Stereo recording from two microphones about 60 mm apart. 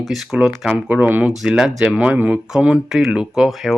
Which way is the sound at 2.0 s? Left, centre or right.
Right.